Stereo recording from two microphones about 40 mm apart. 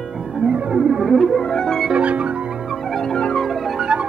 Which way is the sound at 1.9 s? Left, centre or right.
Right.